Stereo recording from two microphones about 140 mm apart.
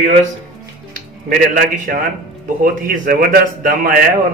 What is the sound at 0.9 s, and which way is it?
Speech, 70° right (ahead or behind).